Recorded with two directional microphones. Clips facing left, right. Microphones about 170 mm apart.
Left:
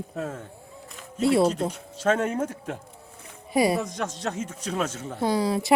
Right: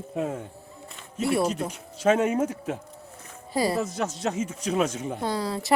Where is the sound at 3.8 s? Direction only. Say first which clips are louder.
Right 2 dB; 5° right (ahead or behind).